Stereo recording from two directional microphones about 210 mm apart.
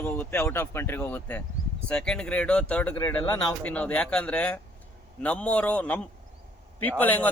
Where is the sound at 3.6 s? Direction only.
5° left (ahead or behind).